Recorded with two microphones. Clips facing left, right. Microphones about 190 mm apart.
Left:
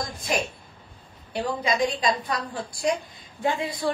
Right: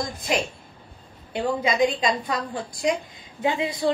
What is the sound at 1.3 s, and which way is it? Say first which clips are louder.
A woman's voice: right 2 dB; 20° right (ahead or behind).